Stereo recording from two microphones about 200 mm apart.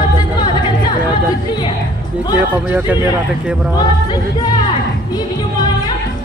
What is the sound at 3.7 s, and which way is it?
Music, 20° left (ahead or behind).